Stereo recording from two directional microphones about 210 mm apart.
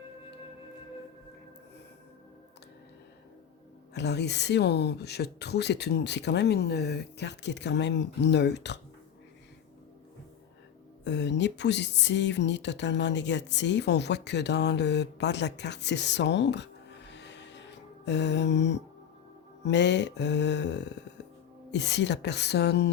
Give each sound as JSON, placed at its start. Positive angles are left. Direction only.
{"t": 3.9, "sound": "speech", "side_deg": 55}
{"t": 11.0, "sound": "speech", "side_deg": 55}
{"t": 17.1, "sound": "music", "side_deg": 55}
{"t": 18.0, "sound": "speech", "side_deg": 55}